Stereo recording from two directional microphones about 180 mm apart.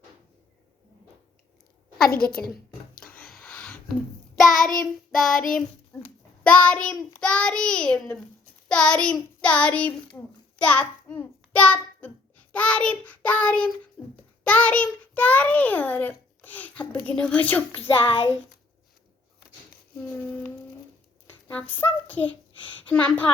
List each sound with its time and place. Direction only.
2.0 s a woman's voice: 55° left (ahead or behind)
3.0 s a sound: 5° left (ahead or behind)
4.4 s child singing: centre (ahead or behind)
4.8 s a child's voice: centre (ahead or behind)
5.9 s a sound: 10° left (ahead or behind)
6.4 s a child's voice: 10° left (ahead or behind)
10.6 s child singing: 5° left (ahead or behind)
14.0 s babbling: 10° left (ahead or behind)
14.4 s a child's voice: 10° left (ahead or behind)
18.0 s speech: 30° left (ahead or behind)
21.4 s speech: 10° left (ahead or behind)